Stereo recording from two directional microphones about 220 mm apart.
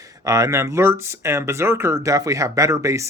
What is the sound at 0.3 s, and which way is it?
Speech, 15° right (ahead or behind).